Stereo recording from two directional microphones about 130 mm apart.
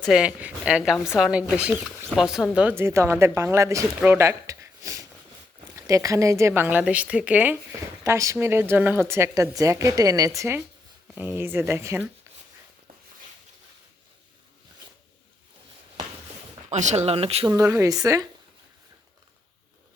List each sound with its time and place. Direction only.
0.0 s speech: 5° right (ahead or behind)
2.6 s a woman's voice: 15° right (ahead or behind)
16.6 s speech: 60° right (ahead or behind)
17.4 s a woman's voice: 25° right (ahead or behind)